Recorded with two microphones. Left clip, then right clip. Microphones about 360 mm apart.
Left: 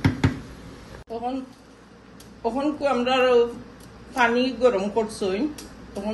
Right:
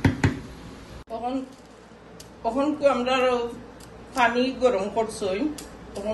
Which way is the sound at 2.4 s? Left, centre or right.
Left.